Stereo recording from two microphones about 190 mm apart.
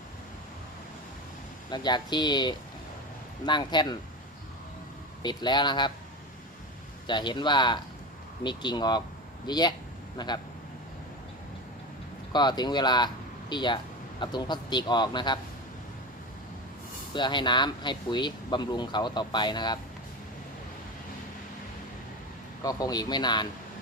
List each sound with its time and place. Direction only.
1.7 s speech: 20° left (ahead or behind)
5.2 s speech: 20° left (ahead or behind)
7.1 s speech: 25° left (ahead or behind)
12.3 s speech: 20° left (ahead or behind)
17.2 s speech: 25° left (ahead or behind)
22.6 s speech: 20° left (ahead or behind)